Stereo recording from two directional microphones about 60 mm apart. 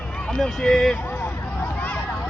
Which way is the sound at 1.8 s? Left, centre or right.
Left.